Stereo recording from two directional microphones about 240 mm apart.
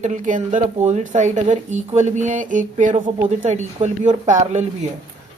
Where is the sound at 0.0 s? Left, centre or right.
Right.